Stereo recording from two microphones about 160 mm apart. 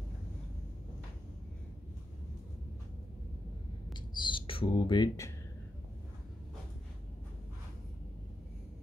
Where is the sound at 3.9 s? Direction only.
30° left (ahead or behind).